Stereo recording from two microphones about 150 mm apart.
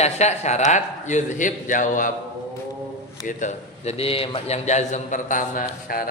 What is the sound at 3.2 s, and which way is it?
A man's voice, 55° left (ahead or behind).